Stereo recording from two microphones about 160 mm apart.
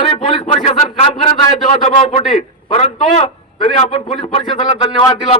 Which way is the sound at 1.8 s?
40° left (ahead or behind).